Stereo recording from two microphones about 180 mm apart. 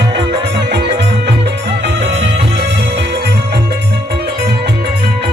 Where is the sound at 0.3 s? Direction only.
65° right (ahead or behind).